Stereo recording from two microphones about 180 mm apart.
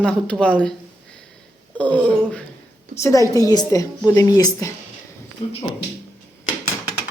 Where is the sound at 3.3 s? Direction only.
20° left (ahead or behind).